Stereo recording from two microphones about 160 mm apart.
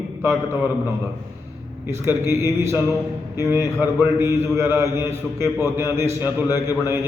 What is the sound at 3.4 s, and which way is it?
A man's voice, 15° right (ahead or behind).